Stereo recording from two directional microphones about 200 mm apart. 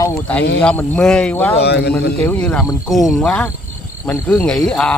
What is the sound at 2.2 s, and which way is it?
Speech, 5° left (ahead or behind).